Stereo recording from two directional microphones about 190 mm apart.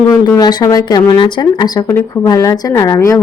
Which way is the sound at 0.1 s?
15° left (ahead or behind).